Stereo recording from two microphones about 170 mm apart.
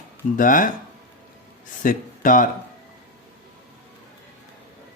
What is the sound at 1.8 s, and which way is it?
Speech, 50° left (ahead or behind).